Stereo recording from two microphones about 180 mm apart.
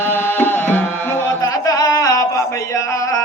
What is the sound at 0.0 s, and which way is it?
Music, 10° left (ahead or behind).